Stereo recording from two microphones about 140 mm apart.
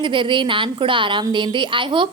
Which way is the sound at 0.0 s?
35° right (ahead or behind).